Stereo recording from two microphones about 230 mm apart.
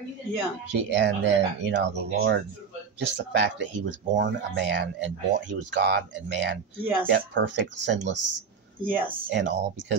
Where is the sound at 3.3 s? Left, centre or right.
Right.